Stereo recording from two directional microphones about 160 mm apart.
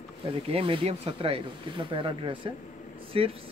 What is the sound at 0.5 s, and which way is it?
Speech, 35° right (ahead or behind).